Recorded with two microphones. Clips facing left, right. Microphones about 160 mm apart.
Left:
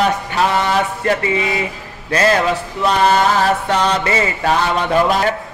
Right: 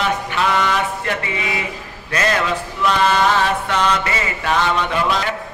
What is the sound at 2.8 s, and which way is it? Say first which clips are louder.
Mantra: left 2 dB; 35° left (ahead or behind).